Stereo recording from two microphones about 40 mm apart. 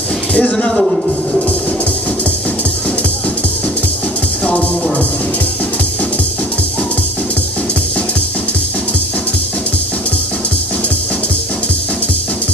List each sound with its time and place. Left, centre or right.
0.3 s speech: left
0.7 s a man's voice: centre